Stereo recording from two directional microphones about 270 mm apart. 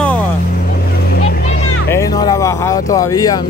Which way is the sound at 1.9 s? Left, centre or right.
Centre.